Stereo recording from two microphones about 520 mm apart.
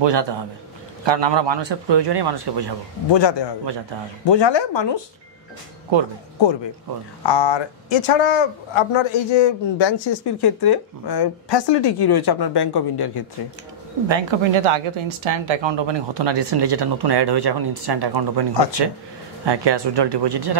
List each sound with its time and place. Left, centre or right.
0.0 s speech: right
3.1 s speech: left
5.9 s speech: right
7.2 s speech: left
14.0 s speech: right